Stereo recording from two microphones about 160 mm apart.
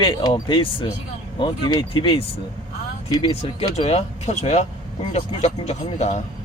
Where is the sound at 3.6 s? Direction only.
40° left (ahead or behind).